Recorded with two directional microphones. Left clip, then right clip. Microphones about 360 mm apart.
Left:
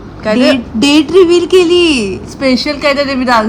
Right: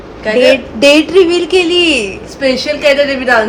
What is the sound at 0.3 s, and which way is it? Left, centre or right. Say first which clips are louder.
Speech: right 2 dB; centre.